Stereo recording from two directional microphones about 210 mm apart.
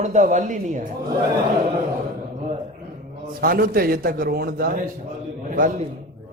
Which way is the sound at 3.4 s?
45° right (ahead or behind).